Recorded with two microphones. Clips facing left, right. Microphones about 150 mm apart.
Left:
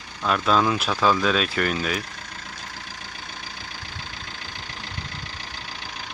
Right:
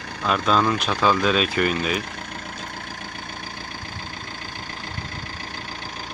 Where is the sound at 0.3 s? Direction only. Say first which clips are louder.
Even; centre (ahead or behind).